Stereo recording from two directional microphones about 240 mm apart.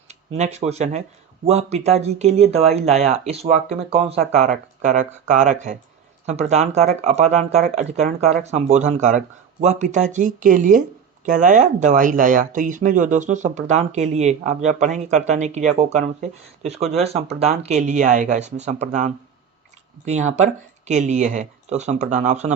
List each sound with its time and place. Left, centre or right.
0.3 s speech: right
20.1 s speech: right